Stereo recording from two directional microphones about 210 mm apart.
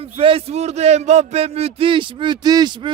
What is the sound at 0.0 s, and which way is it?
A man's voice, 25° right (ahead or behind).